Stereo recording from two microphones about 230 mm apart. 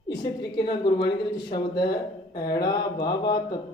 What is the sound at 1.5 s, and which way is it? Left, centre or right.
Speech, centre.